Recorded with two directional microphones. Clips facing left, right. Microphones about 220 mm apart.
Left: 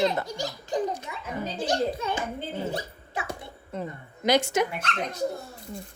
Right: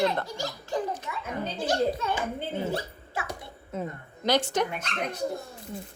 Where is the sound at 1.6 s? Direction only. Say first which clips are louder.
Right 1 dB; 15° left (ahead or behind).